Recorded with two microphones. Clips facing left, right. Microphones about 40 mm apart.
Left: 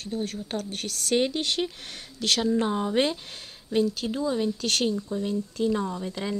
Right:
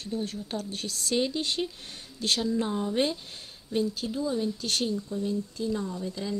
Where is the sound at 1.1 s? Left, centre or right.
Left.